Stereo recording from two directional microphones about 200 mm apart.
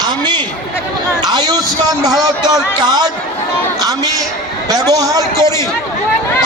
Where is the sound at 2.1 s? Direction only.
Centre (ahead or behind).